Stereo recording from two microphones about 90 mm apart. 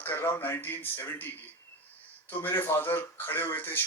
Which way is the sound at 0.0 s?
25° left (ahead or behind).